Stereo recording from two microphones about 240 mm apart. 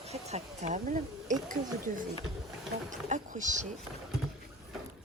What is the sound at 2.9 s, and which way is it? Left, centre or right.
Speech, right.